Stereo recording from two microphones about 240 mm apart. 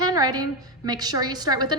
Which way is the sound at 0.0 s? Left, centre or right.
Centre.